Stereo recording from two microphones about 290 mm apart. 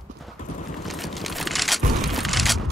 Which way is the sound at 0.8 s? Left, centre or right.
Centre.